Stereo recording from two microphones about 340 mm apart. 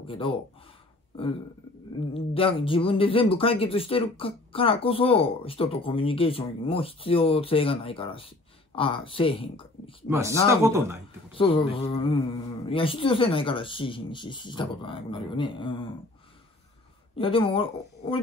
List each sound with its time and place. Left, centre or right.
0.0 s speech: centre
10.0 s speech: centre
11.3 s speech: centre
17.1 s speech: centre